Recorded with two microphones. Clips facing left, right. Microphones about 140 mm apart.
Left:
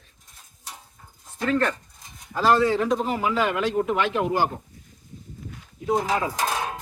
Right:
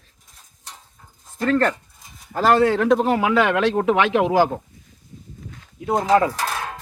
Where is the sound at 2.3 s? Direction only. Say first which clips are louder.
Right 3 dB; 55° right (ahead or behind); by 4.4 s 85° right.